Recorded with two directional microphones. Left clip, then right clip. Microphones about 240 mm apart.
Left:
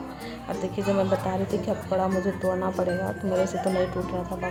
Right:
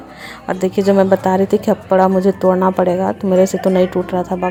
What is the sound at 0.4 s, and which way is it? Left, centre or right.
Speech, right.